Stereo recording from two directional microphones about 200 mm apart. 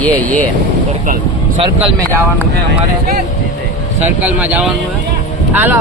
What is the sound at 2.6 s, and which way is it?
Speech, 50° right (ahead or behind).